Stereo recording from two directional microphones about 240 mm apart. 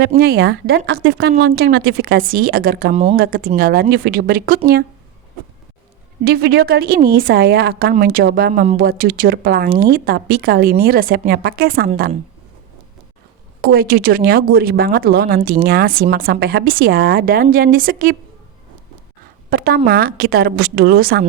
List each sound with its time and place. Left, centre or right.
0.2 s a woman's voice: right
6.2 s a woman's voice: right
13.6 s a woman's voice: right
19.5 s a woman's voice: right